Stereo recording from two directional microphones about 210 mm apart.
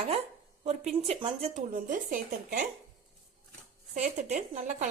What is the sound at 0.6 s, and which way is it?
Speech, 30° right (ahead or behind).